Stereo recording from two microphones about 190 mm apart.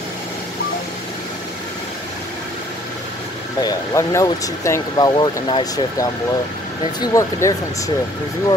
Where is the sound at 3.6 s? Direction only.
20° left (ahead or behind).